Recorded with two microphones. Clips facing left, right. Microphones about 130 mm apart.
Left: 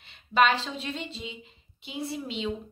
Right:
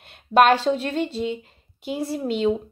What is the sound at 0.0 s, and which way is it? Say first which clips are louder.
A woman's voice: right 7 dB; 55° right (ahead or behind).